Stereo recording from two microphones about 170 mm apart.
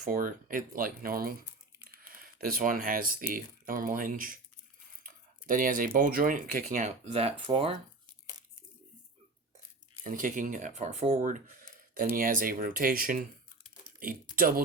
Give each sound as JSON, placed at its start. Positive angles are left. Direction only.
{"t": 0.0, "sound": "speech", "side_deg": -50}
{"t": 10.0, "sound": "speech", "side_deg": -50}
{"t": 14.3, "sound": "speech", "side_deg": -60}